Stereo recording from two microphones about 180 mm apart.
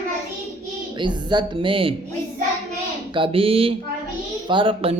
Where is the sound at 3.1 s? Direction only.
30° right (ahead or behind).